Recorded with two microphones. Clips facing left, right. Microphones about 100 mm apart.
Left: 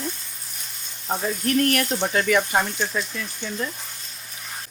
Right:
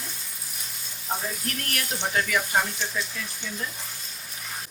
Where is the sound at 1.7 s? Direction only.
60° left (ahead or behind).